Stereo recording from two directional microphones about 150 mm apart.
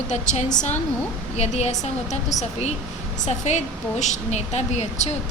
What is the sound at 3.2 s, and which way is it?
A woman's voice, 50° left (ahead or behind).